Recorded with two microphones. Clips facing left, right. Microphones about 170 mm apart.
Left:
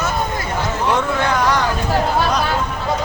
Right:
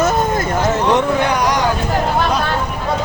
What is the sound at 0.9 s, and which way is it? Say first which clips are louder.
Speech: right 3 dB; 15° right (ahead or behind).